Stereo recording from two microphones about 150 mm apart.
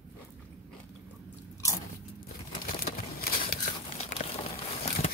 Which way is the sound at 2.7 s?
80° left.